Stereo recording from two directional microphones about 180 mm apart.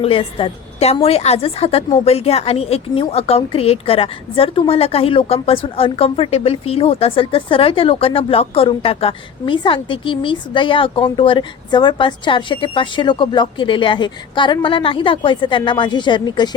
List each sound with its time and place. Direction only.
0.0 s a woman's voice: 30° left (ahead or behind)